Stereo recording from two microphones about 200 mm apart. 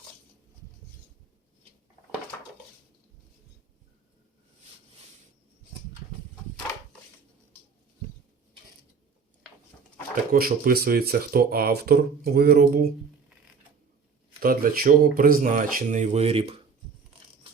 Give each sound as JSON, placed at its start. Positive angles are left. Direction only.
{"t": 10.3, "sound": "speech", "side_deg": -45}
{"t": 14.4, "sound": "speech", "side_deg": -45}